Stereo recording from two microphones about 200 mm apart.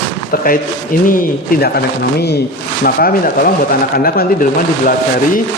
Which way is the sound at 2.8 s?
45° left (ahead or behind).